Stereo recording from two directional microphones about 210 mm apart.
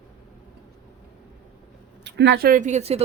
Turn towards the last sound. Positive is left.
turn(degrees=-30)  # may be behind; listen again after turning